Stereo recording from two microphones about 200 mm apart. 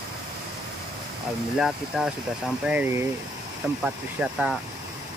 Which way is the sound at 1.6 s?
5° right (ahead or behind).